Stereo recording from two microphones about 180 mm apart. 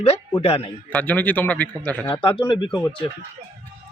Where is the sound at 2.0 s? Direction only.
25° left (ahead or behind).